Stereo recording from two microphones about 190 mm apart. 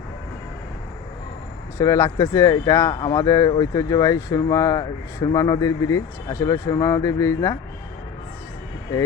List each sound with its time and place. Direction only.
1.8 s speech: 15° left (ahead or behind)